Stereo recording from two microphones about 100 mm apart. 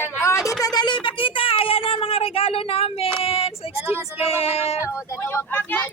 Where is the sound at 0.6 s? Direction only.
45° left (ahead or behind); by 3.8 s 75° left (ahead or behind).